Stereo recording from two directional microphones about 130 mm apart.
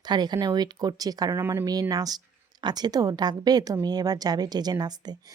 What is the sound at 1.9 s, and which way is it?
A woman's voice, 30° right (ahead or behind).